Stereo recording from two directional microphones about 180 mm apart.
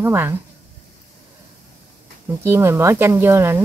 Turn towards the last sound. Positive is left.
turn(degrees=-15)  # may be behind; listen again after turning